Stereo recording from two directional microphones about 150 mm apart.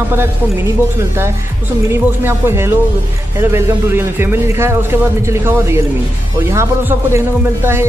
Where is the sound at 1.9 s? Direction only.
15° right (ahead or behind).